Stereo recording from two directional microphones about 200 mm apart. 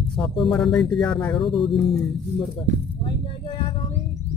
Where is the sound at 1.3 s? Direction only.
25° left (ahead or behind).